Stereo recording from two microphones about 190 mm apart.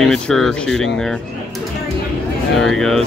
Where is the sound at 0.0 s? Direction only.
Centre (ahead or behind).